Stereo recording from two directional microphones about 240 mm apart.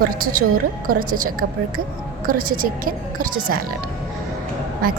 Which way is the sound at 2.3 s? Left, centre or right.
Right.